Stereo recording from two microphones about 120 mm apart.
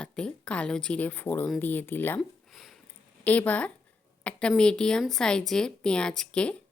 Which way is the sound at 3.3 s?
10° left (ahead or behind).